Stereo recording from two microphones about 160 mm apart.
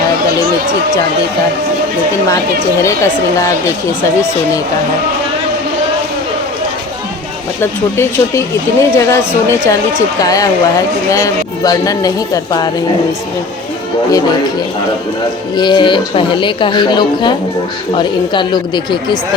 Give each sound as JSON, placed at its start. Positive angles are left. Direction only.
{"t": 2.7, "sound": "speech", "side_deg": 20}
{"t": 7.6, "sound": "speech", "side_deg": 15}
{"t": 14.1, "sound": "speech", "side_deg": 25}
{"t": 15.5, "sound": "speech", "side_deg": 30}